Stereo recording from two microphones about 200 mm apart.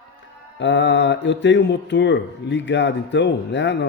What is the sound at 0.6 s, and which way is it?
A man's voice, 65° left (ahead or behind).